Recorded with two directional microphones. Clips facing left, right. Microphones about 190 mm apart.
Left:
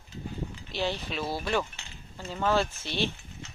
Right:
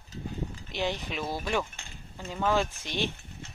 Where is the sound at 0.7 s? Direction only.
15° right (ahead or behind).